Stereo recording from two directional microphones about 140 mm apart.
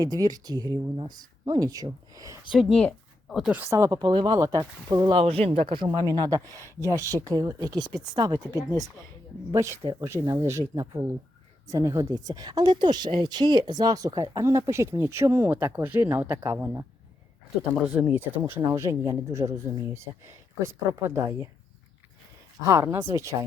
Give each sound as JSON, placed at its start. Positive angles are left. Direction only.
{"t": 0.0, "sound": "speech", "side_deg": -25}
{"t": 2.5, "sound": "speech", "side_deg": -5}
{"t": 2.7, "sound": "speech", "side_deg": 5}
{"t": 3.5, "sound": "speech", "side_deg": -15}
{"t": 5.1, "sound": "speech", "side_deg": -45}
{"t": 9.5, "sound": "speech", "side_deg": -20}
{"t": 22.6, "sound": "speech", "side_deg": -20}